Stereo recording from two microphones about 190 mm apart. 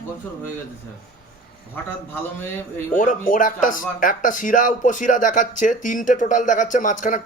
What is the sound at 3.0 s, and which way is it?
Speech, 45° left (ahead or behind).